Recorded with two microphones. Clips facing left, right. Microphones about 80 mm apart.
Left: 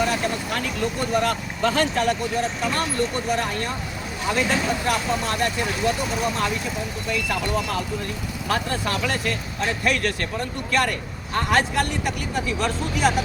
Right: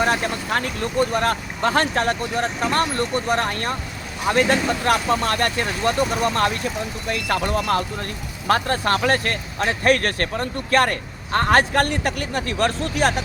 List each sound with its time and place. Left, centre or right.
0.0 s speech: right
7.1 s speech: right